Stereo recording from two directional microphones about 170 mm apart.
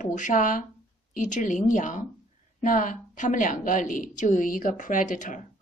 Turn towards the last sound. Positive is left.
turn(degrees=50)  # may be behind; listen again after turning